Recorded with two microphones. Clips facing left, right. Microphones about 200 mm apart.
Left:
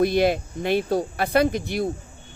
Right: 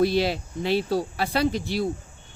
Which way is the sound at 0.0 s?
50° left (ahead or behind).